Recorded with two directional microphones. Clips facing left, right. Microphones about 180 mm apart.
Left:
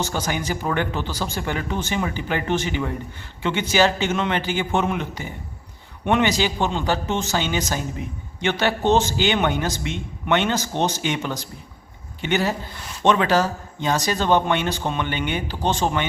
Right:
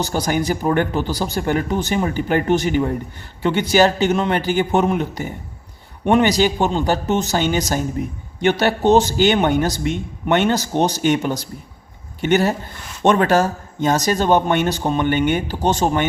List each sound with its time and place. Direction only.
0.0 s speech: 40° right (ahead or behind)